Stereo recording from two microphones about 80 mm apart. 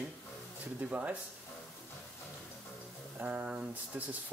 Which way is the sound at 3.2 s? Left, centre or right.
Centre.